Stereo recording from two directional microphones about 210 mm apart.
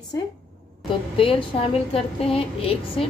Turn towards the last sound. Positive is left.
turn(degrees=25)  # may be behind; listen again after turning